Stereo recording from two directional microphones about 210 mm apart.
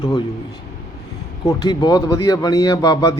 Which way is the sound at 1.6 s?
20° left (ahead or behind).